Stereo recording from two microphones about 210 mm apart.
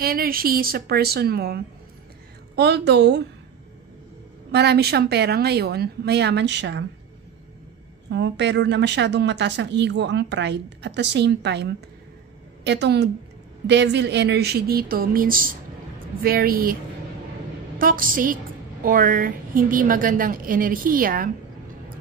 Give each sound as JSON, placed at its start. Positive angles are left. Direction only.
{"t": 0.0, "sound": "a woman's voice", "side_deg": -45}
{"t": 4.5, "sound": "a woman's voice", "side_deg": -50}
{"t": 8.1, "sound": "a woman's voice", "side_deg": -55}
{"t": 17.7, "sound": "a woman's voice", "side_deg": -40}